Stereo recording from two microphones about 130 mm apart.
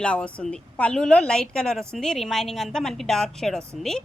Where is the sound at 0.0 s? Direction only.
10° left (ahead or behind).